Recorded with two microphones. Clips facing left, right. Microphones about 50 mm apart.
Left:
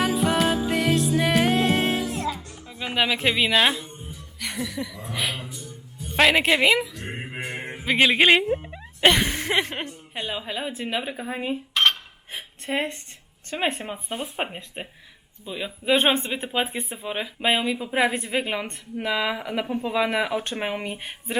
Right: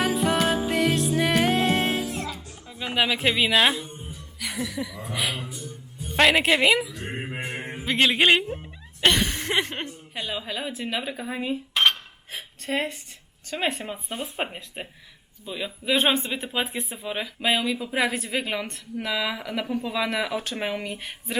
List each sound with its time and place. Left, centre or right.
0.0 s music: centre
3.8 s music: centre
5.0 s a woman's voice: centre
6.9 s mantra: centre
7.9 s a woman's voice: centre
8.5 s a sound: centre
10.2 s speech: centre
11.7 s cutlery: centre
12.3 s a woman's voice: centre